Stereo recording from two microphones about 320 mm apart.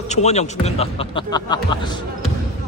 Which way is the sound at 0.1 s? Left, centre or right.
Left.